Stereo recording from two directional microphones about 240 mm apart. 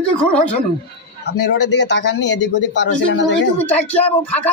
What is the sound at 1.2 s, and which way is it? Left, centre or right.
A man's voice, left.